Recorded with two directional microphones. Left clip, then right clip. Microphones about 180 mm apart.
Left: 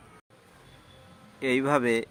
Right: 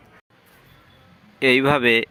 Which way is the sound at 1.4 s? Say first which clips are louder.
Right 8 dB; 45° right (ahead or behind).